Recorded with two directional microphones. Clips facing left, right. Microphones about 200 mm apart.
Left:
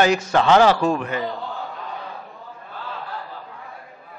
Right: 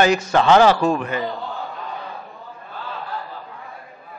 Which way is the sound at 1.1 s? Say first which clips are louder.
Right 1 dB; 20° right (ahead or behind).